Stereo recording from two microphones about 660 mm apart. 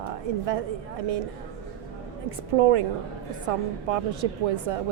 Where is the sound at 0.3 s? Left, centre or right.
Right.